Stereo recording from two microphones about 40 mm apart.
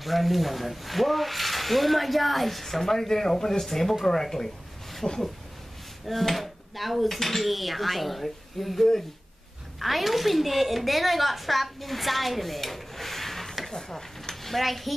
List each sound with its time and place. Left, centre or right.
0.0 s a woman's voice: centre
5.0 s speech: left
6.0 s a woman's voice: centre
14.3 s speech: centre